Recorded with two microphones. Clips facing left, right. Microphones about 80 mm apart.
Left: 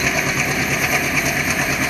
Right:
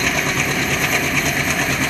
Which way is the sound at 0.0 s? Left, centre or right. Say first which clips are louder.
Even; centre.